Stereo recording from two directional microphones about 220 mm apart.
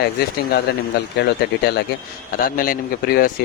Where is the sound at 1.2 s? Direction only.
50° left (ahead or behind).